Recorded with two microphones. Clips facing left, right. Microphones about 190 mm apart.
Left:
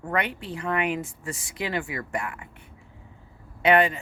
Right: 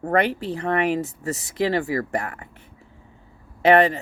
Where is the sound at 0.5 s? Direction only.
40° right (ahead or behind).